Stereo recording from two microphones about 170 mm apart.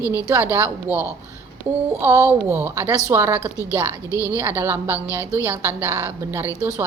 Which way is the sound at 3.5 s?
15° left (ahead or behind).